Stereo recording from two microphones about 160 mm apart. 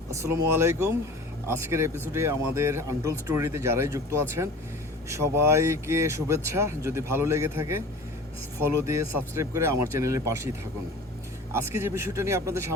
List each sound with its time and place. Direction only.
0.2 s speech: 15° right (ahead or behind)
11.5 s speech: 15° right (ahead or behind)